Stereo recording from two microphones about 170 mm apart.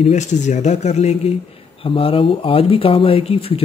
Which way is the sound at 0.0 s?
45° left (ahead or behind).